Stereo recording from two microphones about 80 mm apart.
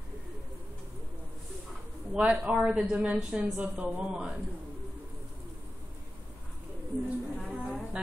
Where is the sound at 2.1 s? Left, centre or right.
Centre.